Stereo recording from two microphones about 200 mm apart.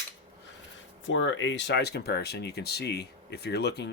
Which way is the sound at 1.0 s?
65° left (ahead or behind).